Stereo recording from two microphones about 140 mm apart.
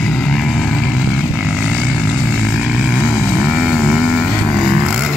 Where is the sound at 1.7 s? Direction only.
5° left (ahead or behind).